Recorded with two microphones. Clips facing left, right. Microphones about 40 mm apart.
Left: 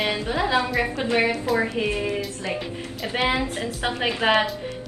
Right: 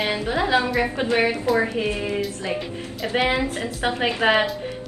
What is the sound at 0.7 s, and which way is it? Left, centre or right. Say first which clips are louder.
Speech: right 1 dB; centre.